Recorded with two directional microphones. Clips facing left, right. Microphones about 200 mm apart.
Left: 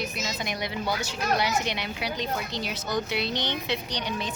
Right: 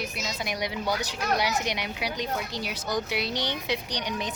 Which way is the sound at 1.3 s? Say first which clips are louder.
Even; 10° right (ahead or behind).